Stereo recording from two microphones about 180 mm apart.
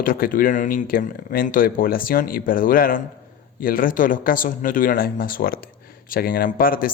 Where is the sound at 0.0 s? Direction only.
50° left (ahead or behind).